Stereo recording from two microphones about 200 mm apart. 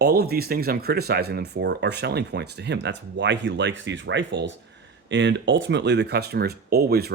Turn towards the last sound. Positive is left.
turn(degrees=-50)  # may be behind; listen again after turning